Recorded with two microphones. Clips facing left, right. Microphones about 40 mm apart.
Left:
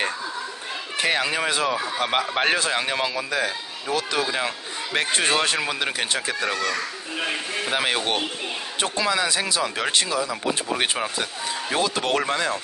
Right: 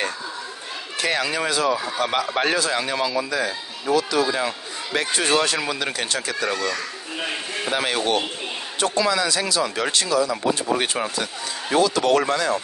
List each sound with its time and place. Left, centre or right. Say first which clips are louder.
1.0 s speech: even; left
4.9 s speech: right 1 dB; left
6.5 s speech: even; centre
10.3 s speech: right 3 dB; centre
11.8 s speech: right 5 dB; left